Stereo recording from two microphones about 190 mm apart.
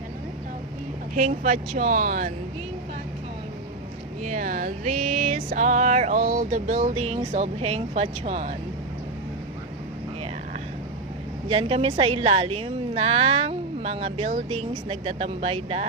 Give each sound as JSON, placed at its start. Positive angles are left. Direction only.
{"t": 1.1, "sound": "a woman's voice", "side_deg": -40}
{"t": 4.2, "sound": "a woman's voice", "side_deg": -40}
{"t": 11.4, "sound": "a woman's voice", "side_deg": -30}